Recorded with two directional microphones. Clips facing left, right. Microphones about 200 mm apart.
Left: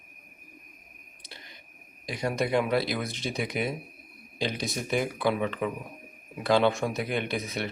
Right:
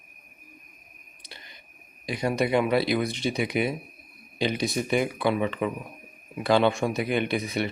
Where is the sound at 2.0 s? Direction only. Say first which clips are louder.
Right 3 dB; centre (ahead or behind).